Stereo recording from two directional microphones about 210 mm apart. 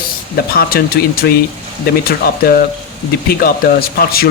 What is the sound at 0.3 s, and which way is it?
Speech, 45° left (ahead or behind).